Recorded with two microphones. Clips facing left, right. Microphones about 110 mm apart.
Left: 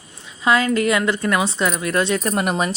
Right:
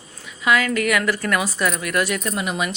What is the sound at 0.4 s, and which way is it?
A woman's voice, 30° left (ahead or behind).